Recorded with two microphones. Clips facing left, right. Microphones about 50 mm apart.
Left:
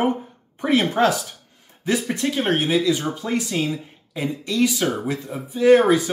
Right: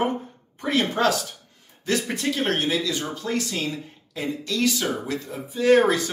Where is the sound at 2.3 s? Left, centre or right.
Centre.